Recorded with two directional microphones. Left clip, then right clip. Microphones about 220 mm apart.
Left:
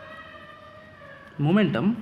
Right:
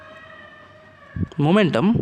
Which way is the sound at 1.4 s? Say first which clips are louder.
Right 6 dB; 50° right (ahead or behind).